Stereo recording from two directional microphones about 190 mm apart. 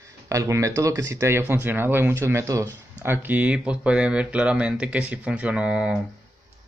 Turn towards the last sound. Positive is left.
turn(degrees=-5)  # may be behind; listen again after turning